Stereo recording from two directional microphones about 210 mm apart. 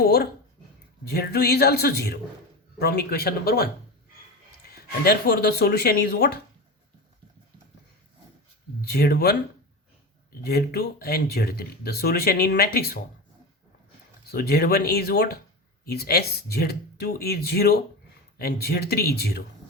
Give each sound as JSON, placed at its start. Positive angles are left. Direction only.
{"t": 0.0, "sound": "speech", "side_deg": 50}
{"t": 4.7, "sound": "speech", "side_deg": 50}
{"t": 8.9, "sound": "speech", "side_deg": 50}
{"t": 10.4, "sound": "speech", "side_deg": 50}
{"t": 14.3, "sound": "speech", "side_deg": 50}